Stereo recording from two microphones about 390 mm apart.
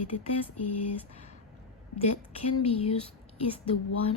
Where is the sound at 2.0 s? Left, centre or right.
Centre.